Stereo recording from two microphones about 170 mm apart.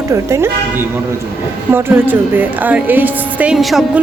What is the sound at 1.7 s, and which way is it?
A woman's voice, 15° right (ahead or behind).